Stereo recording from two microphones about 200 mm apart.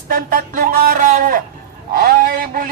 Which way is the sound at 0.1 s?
45° right (ahead or behind).